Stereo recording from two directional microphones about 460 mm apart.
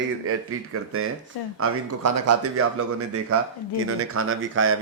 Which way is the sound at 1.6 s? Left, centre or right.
Right.